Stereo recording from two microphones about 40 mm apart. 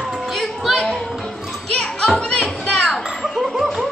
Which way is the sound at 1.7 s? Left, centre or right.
Centre.